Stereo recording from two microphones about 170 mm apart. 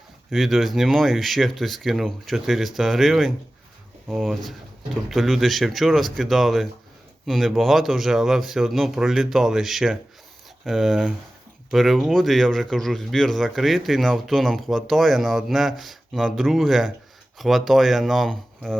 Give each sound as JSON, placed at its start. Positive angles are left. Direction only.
{"t": 0.3, "sound": "speech", "side_deg": 0}